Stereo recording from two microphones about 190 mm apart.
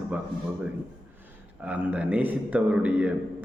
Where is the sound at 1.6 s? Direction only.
10° right (ahead or behind).